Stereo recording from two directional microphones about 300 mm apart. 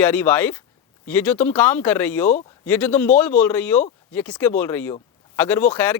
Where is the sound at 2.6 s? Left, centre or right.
Centre.